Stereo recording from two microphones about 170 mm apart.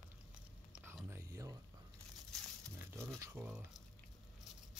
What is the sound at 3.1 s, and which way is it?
Speech, 15° right (ahead or behind).